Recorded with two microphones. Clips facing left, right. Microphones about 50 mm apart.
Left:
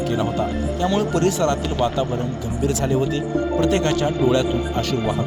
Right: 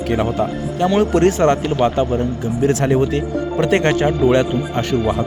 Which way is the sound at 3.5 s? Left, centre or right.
Right.